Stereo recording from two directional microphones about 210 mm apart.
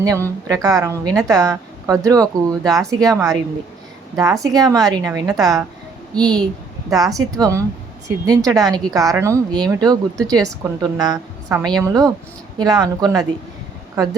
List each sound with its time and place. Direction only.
0.0 s a woman's voice: 15° right (ahead or behind)